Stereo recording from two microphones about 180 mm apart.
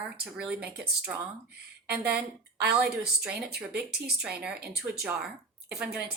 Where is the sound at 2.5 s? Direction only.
65° right (ahead or behind).